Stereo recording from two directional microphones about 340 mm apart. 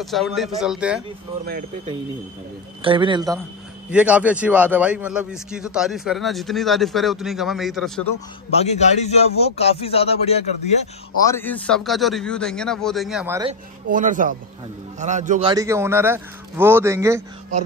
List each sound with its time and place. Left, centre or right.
0.0 s a man's voice: centre
2.8 s a man's voice: centre
8.5 s a man's voice: centre
13.5 s a man's voice: right